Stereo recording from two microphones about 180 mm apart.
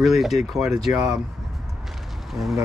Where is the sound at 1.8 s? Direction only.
Centre (ahead or behind).